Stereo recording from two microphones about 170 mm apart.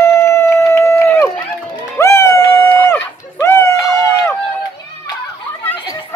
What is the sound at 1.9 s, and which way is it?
Cat, 15° left (ahead or behind).